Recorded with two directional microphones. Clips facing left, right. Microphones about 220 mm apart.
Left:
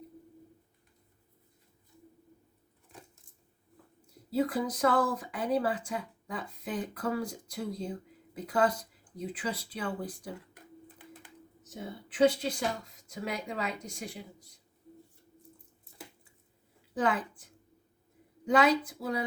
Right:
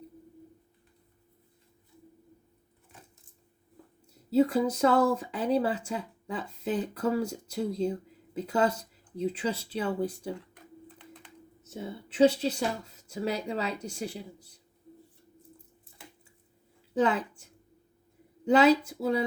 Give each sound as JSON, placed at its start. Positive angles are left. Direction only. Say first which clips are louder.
{"t": 4.3, "sound": "speech", "louder": "right 6 dB", "side_deg": -25}
{"t": 12.0, "sound": "a woman's voice", "louder": "right 3 dB", "side_deg": -25}
{"t": 17.0, "sound": "speech", "louder": "right 4 dB", "side_deg": -25}
{"t": 18.4, "sound": "speech", "louder": "right 4 dB", "side_deg": -30}